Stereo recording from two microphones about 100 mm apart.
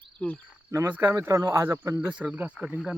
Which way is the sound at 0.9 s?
20° right (ahead or behind).